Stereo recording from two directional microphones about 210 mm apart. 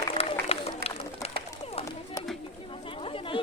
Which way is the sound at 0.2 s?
30° left (ahead or behind).